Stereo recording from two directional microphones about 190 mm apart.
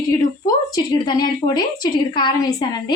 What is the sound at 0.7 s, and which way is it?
A woman's voice, 20° left (ahead or behind).